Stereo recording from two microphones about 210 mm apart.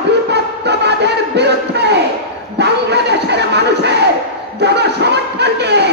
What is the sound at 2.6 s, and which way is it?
Crowd, 55° right (ahead or behind).